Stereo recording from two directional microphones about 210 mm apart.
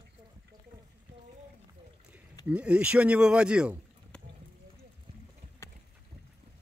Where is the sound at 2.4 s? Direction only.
5° right (ahead or behind).